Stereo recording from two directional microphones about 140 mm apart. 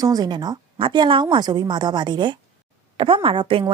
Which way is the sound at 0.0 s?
30° right (ahead or behind).